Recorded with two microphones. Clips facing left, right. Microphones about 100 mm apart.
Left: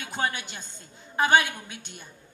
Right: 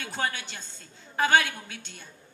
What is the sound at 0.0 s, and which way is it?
A woman's voice, 15° left (ahead or behind).